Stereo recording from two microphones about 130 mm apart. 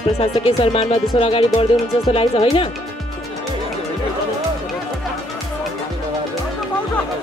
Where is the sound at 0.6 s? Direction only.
45° left (ahead or behind).